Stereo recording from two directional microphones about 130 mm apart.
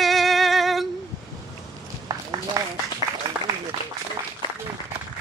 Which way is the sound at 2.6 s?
25° right (ahead or behind).